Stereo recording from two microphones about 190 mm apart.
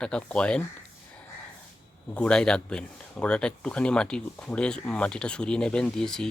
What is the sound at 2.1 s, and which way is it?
Speech, 5° left (ahead or behind).